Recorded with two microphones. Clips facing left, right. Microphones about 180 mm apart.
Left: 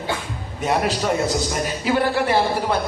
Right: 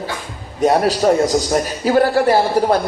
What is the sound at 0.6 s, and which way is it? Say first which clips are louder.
A man's voice: right 7 dB; 40° right (ahead or behind).